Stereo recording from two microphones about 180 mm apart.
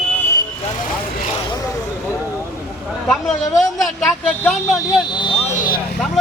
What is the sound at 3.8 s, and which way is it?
Vehicle, centre (ahead or behind).